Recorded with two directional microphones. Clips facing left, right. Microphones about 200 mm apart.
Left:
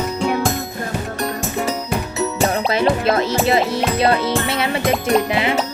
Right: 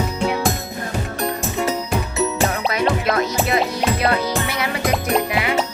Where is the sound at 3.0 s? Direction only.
30° left (ahead or behind).